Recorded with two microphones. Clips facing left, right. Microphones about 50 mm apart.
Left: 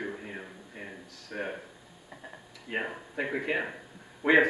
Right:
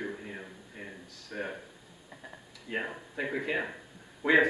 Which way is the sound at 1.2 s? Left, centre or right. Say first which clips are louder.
Left 1 dB; left.